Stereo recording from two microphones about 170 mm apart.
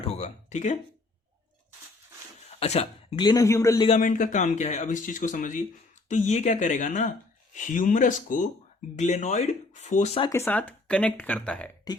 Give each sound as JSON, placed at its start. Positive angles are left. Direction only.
{"t": 0.0, "sound": "a sound", "side_deg": 40}
{"t": 2.5, "sound": "speech", "side_deg": 40}
{"t": 3.2, "sound": "a man's voice", "side_deg": 25}
{"t": 3.8, "sound": "speech", "side_deg": 45}
{"t": 10.2, "sound": "speech", "side_deg": 20}